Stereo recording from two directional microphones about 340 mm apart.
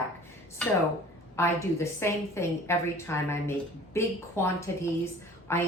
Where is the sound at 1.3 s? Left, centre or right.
Centre.